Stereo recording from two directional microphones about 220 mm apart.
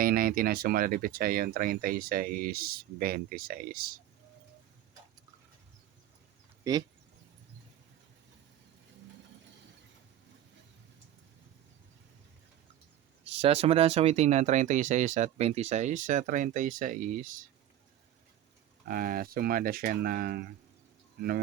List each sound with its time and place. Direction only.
0.0 s speech: 40° right (ahead or behind)
6.7 s speech: 15° right (ahead or behind)
13.4 s speech: 25° right (ahead or behind)
18.9 s speech: 40° right (ahead or behind)